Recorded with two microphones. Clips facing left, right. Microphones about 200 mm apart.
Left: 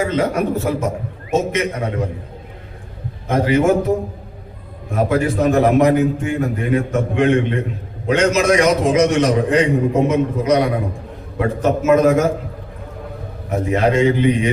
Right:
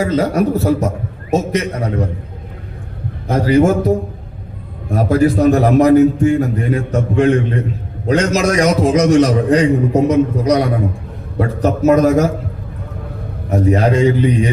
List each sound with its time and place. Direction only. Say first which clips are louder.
0.0 s a man's voice: right 3 dB; 35° right (ahead or behind)
3.2 s a man's voice: right 3 dB; 35° right (ahead or behind)
13.5 s a man's voice: right 3 dB; 35° right (ahead or behind)